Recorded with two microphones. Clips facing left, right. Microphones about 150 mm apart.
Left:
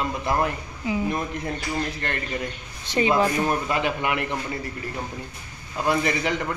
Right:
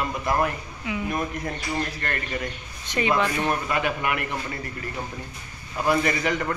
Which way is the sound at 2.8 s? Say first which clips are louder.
Left 3 dB; 30° left (ahead or behind).